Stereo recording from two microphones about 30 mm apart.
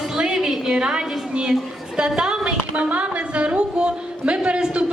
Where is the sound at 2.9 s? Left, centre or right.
Right.